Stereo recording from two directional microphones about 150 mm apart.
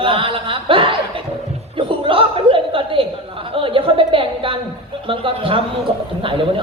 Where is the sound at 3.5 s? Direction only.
35° right (ahead or behind).